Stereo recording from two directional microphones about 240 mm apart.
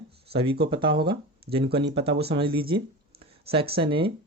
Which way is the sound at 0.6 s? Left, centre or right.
Right.